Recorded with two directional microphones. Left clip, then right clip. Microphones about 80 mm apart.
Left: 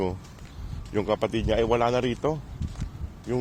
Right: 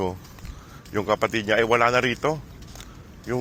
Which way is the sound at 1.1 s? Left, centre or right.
Left.